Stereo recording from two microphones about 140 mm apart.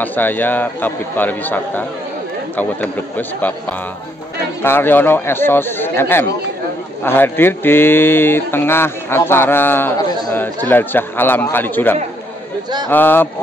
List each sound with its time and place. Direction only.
0.0 s speech: 15° left (ahead or behind)
4.6 s speech: 15° left (ahead or behind)